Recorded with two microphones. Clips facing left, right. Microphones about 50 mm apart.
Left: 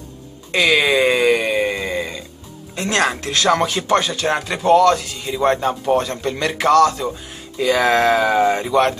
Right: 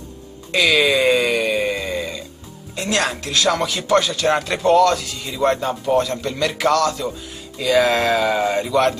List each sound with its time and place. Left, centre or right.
0.5 s a sound: left
2.7 s speech: left; by 4.9 s centre
4.9 s speech: left